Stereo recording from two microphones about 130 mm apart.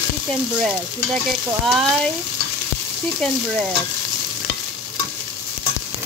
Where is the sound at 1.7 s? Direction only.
5° left (ahead or behind).